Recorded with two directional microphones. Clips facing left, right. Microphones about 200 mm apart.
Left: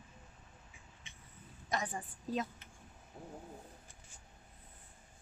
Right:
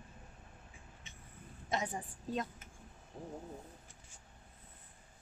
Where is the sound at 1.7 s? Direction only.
25° right (ahead or behind).